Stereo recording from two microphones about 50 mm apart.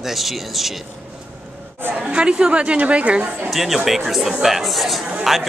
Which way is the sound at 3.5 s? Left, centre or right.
Centre.